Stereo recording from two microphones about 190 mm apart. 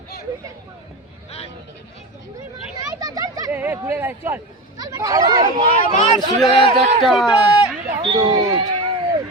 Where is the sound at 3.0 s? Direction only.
20° right (ahead or behind).